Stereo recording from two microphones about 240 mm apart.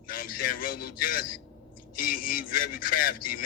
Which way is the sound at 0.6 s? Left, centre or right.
Left.